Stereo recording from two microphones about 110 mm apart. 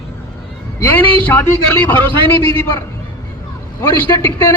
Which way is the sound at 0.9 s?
15° left (ahead or behind).